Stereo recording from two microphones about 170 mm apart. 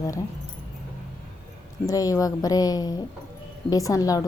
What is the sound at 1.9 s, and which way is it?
Speech, 20° left (ahead or behind).